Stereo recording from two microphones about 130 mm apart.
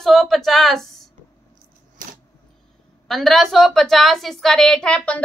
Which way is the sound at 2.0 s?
90° right.